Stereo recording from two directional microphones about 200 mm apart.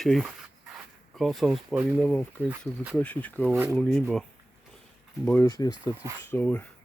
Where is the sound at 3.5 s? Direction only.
10° right (ahead or behind).